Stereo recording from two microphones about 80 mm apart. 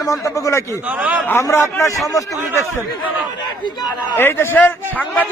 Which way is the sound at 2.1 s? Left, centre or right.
Left.